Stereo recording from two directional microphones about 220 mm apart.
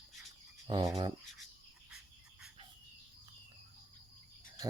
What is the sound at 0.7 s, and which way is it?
Speech, 15° right (ahead or behind).